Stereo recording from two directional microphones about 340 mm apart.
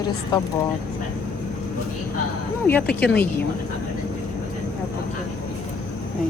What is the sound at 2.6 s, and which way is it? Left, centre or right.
Speech, centre.